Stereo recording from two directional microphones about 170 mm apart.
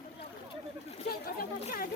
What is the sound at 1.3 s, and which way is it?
Speech, 55° left (ahead or behind).